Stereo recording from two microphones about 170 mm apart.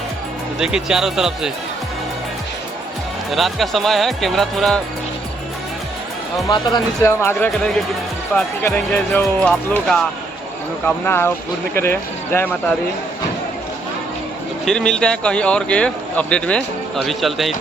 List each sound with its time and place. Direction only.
0.6 s a man's voice: 5° right (ahead or behind)
3.3 s a man's voice: centre (ahead or behind)
6.3 s speech: 25° left (ahead or behind)
8.6 s a man's voice: 10° left (ahead or behind)
14.6 s a man's voice: 5° left (ahead or behind)